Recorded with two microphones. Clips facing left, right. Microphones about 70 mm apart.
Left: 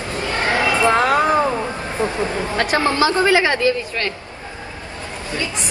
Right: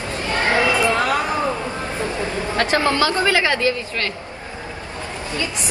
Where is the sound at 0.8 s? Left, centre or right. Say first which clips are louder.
Left 4 dB; left.